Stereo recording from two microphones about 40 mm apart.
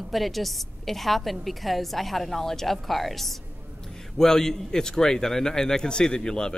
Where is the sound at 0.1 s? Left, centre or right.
Centre.